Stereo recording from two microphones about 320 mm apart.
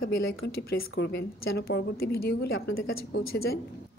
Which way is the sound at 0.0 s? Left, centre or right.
Left.